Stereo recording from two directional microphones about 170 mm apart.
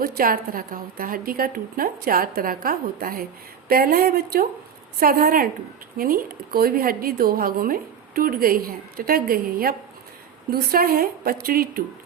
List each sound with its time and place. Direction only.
0.0 s speech: 55° right (ahead or behind)